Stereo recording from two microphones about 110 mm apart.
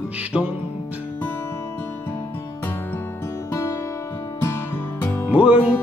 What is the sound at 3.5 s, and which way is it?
Music, 25° left (ahead or behind).